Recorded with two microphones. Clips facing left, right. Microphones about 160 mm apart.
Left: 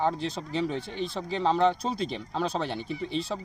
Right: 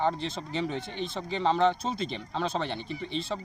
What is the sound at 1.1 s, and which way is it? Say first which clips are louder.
Speech: left 1 dB; centre (ahead or behind).